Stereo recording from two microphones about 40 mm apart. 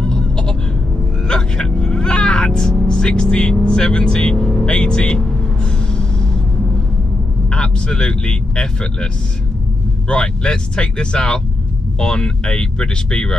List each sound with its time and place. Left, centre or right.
0.0 s a sound: centre
1.2 s speech: left
7.4 s speech: left